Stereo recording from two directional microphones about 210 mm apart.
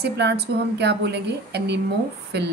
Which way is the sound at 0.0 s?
50° right (ahead or behind).